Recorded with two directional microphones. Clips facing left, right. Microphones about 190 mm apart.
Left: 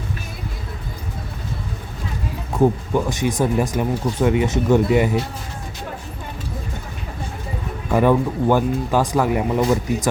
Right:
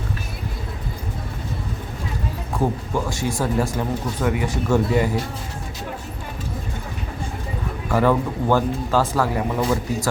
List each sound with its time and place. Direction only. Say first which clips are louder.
2.5 s speech: left 6 dB; 20° left (ahead or behind)
7.9 s speech: left 2 dB; 15° left (ahead or behind)